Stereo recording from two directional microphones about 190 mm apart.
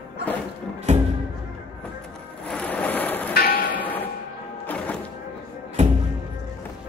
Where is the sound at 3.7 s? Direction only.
10° left (ahead or behind).